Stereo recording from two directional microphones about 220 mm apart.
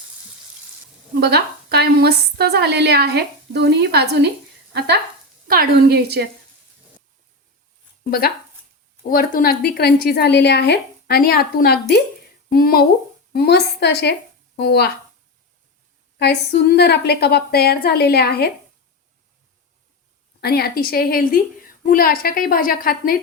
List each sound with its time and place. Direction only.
1.1 s a woman's voice: 45° right (ahead or behind)
9.0 s a woman's voice: 40° left (ahead or behind)
16.1 s a woman's voice: 50° left (ahead or behind)
20.4 s a woman's voice: 45° left (ahead or behind)